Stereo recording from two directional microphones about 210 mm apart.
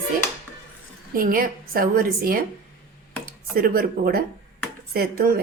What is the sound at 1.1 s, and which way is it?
Speech, 40° right (ahead or behind).